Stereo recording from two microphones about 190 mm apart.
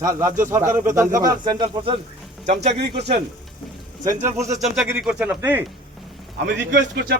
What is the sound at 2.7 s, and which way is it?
Speech, 60° right (ahead or behind).